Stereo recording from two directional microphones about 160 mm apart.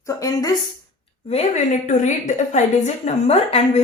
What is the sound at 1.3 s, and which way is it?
A woman's voice, 45° left (ahead or behind).